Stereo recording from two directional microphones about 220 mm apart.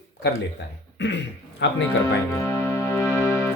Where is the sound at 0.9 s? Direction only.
50° left (ahead or behind).